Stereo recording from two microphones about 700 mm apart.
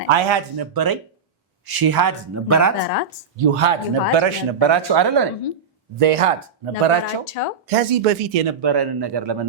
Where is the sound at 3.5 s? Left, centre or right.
Right.